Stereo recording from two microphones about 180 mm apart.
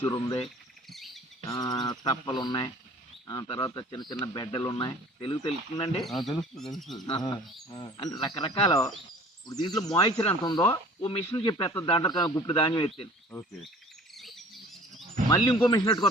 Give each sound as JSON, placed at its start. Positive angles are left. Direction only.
{"t": 0.0, "sound": "speech", "side_deg": 20}
{"t": 0.9, "sound": "a sound", "side_deg": 0}
{"t": 1.5, "sound": "speech", "side_deg": 20}
{"t": 6.0, "sound": "speech", "side_deg": 0}
{"t": 7.0, "sound": "speech", "side_deg": 25}
{"t": 14.2, "sound": "bird", "side_deg": 0}
{"t": 15.3, "sound": "speech", "side_deg": 20}